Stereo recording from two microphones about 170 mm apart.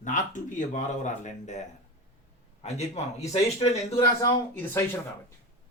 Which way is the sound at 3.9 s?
15° left (ahead or behind).